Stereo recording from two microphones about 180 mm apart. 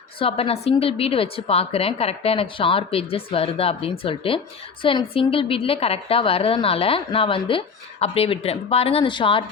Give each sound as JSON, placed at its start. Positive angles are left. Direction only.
{"t": 0.2, "sound": "a woman's voice", "side_deg": 30}